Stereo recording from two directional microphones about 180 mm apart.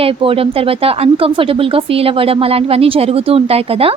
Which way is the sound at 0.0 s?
30° right (ahead or behind).